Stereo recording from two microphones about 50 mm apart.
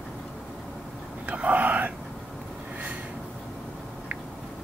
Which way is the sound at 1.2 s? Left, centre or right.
Right.